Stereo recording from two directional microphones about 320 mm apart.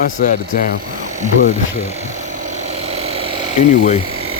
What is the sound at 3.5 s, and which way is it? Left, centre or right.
Speech, left.